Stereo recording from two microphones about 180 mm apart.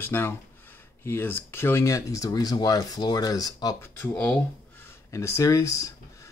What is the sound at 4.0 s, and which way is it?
Speech, 5° left (ahead or behind).